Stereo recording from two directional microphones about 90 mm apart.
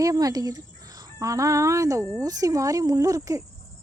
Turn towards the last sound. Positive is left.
turn(degrees=-40)  # may be behind; listen again after turning